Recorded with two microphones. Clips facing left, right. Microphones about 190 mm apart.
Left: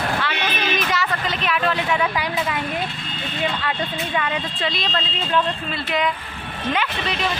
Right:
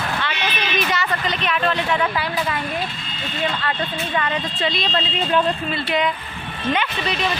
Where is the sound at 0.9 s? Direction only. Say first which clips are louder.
Right 1 dB; centre (ahead or behind).